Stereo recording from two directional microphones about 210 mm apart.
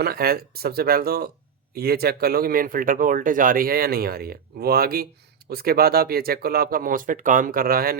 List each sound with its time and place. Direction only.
0.0 s speech: 45° right (ahead or behind)